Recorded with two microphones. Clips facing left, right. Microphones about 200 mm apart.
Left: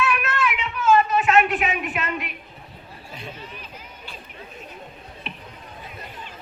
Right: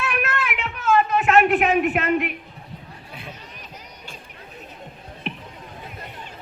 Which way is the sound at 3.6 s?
45° right (ahead or behind).